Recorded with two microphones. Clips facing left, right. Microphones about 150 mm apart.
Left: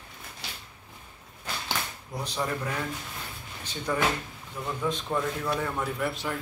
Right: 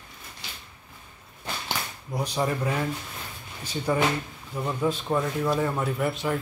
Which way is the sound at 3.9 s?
15° right (ahead or behind).